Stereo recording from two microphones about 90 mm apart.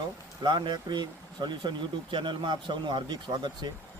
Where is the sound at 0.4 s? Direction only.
60° right (ahead or behind).